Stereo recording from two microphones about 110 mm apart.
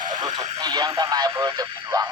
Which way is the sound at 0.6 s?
40° right (ahead or behind).